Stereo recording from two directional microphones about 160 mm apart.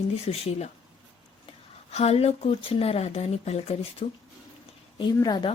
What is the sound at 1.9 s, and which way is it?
A woman's voice, 40° left (ahead or behind).